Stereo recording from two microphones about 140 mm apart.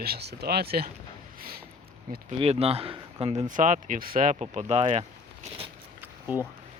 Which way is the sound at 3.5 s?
65° right (ahead or behind).